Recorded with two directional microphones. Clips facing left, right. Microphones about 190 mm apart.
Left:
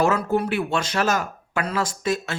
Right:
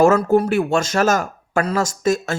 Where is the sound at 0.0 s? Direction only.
45° right (ahead or behind).